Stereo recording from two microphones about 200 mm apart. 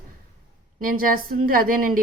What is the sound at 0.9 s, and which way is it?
A woman's voice, 45° right (ahead or behind).